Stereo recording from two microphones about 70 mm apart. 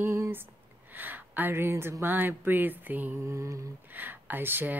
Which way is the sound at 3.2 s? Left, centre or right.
Right.